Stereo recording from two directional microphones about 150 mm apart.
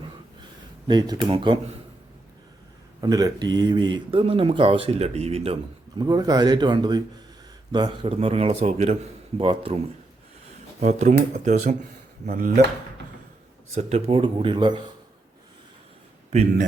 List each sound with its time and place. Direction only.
0.9 s speech: 30° right (ahead or behind)
3.0 s speech: 25° right (ahead or behind); by 5.5 s 40° right (ahead or behind)
6.0 s speech: 25° right (ahead or behind)
10.8 s speech: 50° right (ahead or behind)
13.7 s speech: 40° right (ahead or behind)
16.3 s speech: 50° right (ahead or behind)